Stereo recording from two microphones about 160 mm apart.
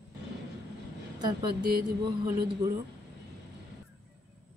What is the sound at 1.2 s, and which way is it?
Speech, 25° right (ahead or behind).